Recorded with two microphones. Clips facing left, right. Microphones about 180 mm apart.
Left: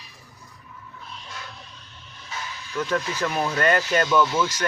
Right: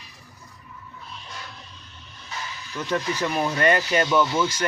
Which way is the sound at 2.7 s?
15° right (ahead or behind).